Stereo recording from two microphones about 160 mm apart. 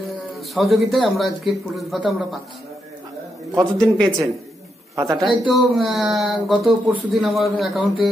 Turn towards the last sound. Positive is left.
turn(degrees=0)  # may be behind; listen again after turning